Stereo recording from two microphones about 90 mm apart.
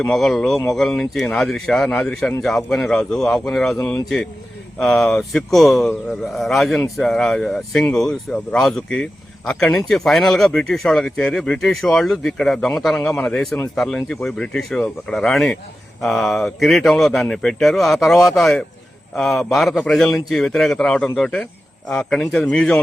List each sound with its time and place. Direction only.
0.1 s speech: 5° left (ahead or behind)
4.8 s speech: 5° left (ahead or behind)
13.0 s speech: 20° left (ahead or behind)
13.2 s speech: 5° left (ahead or behind)